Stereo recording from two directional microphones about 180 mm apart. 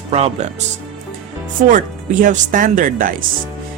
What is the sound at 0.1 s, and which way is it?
Speech, 35° right (ahead or behind).